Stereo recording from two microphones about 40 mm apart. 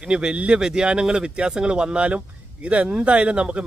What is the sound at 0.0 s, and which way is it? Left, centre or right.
Speech, right.